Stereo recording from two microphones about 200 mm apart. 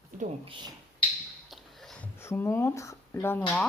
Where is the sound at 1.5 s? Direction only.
Centre (ahead or behind).